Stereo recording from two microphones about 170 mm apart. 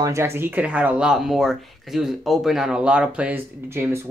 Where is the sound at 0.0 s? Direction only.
15° right (ahead or behind).